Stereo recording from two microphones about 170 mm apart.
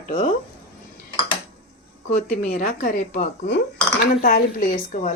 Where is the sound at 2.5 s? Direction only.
50° left (ahead or behind).